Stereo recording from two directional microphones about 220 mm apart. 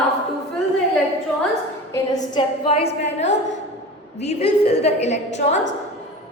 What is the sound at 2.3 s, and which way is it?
A woman's voice, 25° left (ahead or behind).